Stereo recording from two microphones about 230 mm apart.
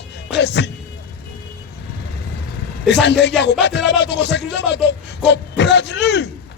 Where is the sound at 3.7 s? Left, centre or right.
Left.